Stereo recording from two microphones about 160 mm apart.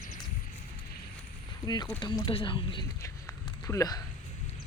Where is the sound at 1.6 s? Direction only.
25° left (ahead or behind).